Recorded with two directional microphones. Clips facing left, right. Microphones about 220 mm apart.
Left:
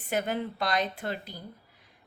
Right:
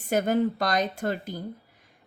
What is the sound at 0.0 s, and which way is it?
Speech, 45° right (ahead or behind).